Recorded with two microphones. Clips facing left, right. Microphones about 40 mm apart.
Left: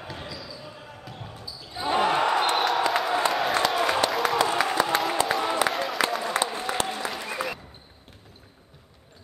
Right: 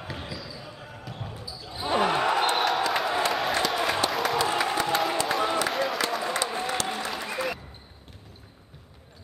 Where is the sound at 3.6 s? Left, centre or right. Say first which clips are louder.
Left 2 dB; centre.